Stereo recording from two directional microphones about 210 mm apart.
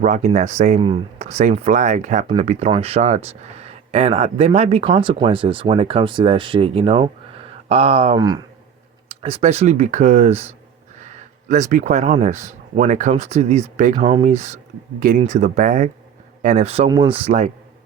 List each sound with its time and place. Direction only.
0.0 s speech: 35° right (ahead or behind)
11.7 s speech: 35° right (ahead or behind)